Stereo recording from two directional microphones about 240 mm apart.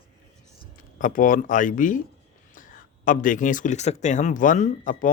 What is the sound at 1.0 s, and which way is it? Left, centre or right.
Speech, left.